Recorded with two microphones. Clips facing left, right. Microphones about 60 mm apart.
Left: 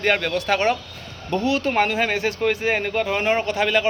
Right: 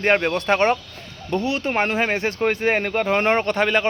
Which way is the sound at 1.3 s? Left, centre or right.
Right.